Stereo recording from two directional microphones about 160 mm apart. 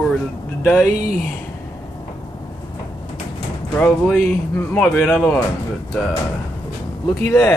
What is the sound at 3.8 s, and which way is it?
Speech, 10° left (ahead or behind).